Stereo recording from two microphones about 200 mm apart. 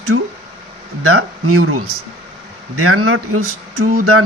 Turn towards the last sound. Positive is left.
turn(degrees=-90)